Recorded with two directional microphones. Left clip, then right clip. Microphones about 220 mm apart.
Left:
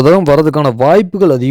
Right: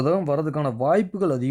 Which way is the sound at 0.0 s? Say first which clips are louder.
Left 14 dB; 45° left (ahead or behind).